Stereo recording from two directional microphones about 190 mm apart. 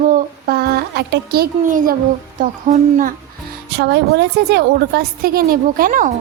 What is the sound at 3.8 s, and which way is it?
A woman's voice, 60° right (ahead or behind).